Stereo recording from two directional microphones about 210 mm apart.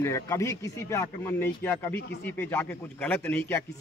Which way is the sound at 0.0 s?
15° left (ahead or behind).